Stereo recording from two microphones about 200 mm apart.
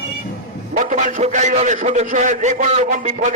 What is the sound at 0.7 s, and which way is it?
A man's voice, 40° right (ahead or behind).